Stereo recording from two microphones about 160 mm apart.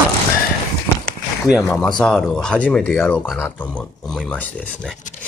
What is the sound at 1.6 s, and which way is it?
Speech, 5° left (ahead or behind).